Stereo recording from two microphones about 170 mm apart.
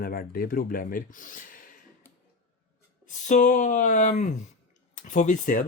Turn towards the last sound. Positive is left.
turn(degrees=50)  # may be behind; listen again after turning